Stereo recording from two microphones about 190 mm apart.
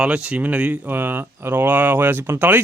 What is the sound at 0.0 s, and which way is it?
Speech, 5° right (ahead or behind).